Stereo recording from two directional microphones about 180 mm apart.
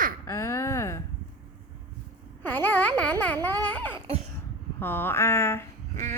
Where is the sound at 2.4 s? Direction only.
10° left (ahead or behind).